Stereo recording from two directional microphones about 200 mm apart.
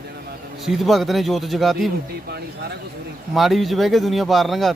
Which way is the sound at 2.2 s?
55° right (ahead or behind).